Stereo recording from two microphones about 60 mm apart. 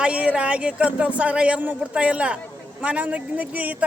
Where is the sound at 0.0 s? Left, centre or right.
Centre.